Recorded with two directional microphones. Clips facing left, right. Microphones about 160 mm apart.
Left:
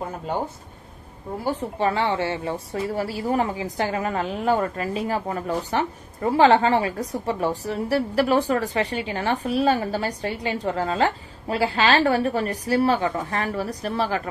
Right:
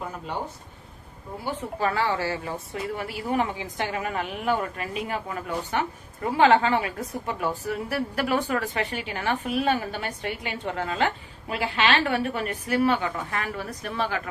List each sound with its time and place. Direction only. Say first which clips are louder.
1.8 s speech: left 2 dB; 25° left (ahead or behind)